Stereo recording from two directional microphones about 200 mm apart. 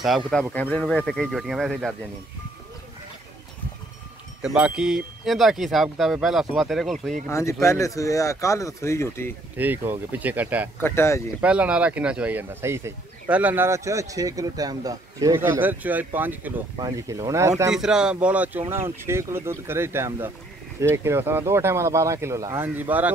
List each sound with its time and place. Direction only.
0.0 s speech: centre (ahead or behind)
4.4 s speech: 5° right (ahead or behind)
7.2 s speech: 15° left (ahead or behind)
9.6 s speech: 10° right (ahead or behind)
10.8 s speech: 15° left (ahead or behind)
11.4 s speech: 5° right (ahead or behind)
17.6 s speech: 5° right (ahead or behind)